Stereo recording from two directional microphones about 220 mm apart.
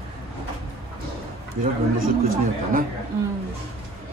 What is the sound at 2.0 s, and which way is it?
Speech, 40° right (ahead or behind).